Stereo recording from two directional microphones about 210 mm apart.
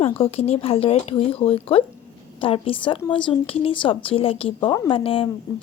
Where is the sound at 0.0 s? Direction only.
30° left (ahead or behind).